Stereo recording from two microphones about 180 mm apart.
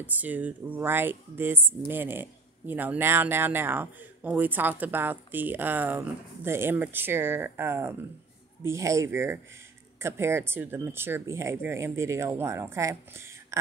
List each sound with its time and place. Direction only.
0.0 s speech: 10° right (ahead or behind)